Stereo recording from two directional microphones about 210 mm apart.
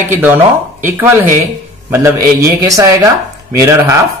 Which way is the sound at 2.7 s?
15° right (ahead or behind).